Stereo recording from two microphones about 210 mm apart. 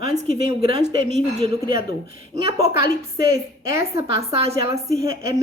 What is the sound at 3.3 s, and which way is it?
A woman's voice, 15° right (ahead or behind).